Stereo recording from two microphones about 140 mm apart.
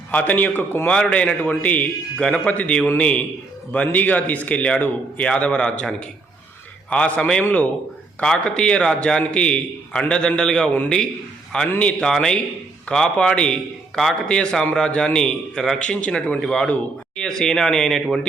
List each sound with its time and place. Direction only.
0.1 s a man's voice: 10° left (ahead or behind)